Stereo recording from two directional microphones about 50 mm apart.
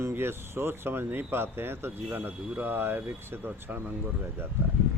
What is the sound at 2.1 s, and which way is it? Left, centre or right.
Speech, right.